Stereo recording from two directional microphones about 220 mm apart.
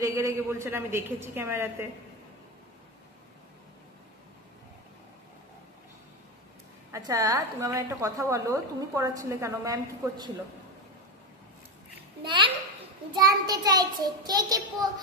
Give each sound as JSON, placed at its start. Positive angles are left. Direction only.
{"t": 0.0, "sound": "a woman's voice", "side_deg": -15}
{"t": 6.9, "sound": "a woman's voice", "side_deg": -15}
{"t": 12.2, "sound": "a child's voice", "side_deg": -20}